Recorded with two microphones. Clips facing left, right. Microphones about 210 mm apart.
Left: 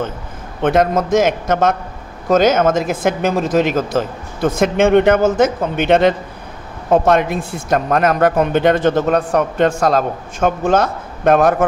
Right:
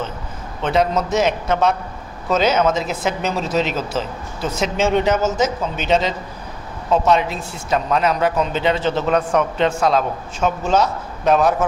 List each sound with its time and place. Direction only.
0.6 s speech: 50° left (ahead or behind)